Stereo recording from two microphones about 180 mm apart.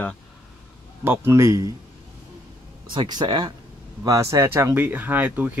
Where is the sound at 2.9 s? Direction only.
25° right (ahead or behind).